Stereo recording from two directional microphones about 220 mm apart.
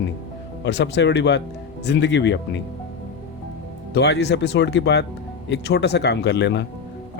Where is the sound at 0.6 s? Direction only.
50° left (ahead or behind).